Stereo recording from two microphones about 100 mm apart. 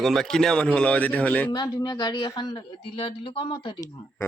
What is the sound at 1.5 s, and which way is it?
Speech, 45° left (ahead or behind).